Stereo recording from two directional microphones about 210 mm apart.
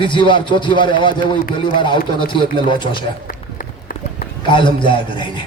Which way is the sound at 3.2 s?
45° left (ahead or behind).